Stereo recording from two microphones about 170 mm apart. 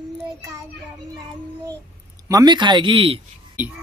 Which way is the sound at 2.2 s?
20° right (ahead or behind).